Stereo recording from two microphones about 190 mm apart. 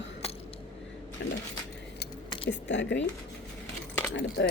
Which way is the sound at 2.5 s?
70° left (ahead or behind).